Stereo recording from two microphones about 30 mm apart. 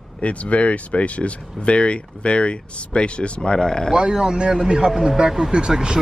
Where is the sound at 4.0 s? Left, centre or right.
Right.